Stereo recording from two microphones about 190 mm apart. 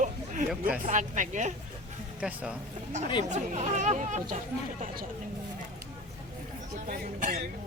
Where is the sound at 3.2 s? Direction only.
40° right (ahead or behind).